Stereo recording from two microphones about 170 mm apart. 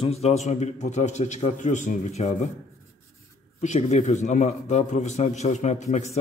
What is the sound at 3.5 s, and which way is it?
Speech, 40° left (ahead or behind).